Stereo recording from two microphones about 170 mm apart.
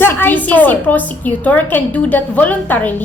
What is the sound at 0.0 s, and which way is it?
A woman's voice, 10° left (ahead or behind).